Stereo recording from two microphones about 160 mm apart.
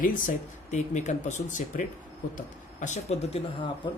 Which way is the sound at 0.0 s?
55° left (ahead or behind).